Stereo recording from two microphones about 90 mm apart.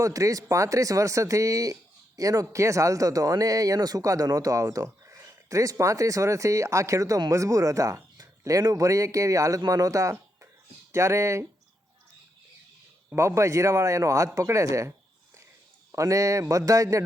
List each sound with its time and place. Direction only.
0.0 s speech: 40° right (ahead or behind)
13.1 s speech: 30° right (ahead or behind)